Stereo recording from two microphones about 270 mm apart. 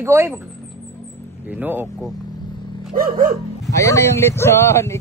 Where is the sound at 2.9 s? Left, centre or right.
Right.